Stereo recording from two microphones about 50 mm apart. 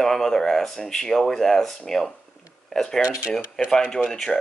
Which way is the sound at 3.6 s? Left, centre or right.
Centre.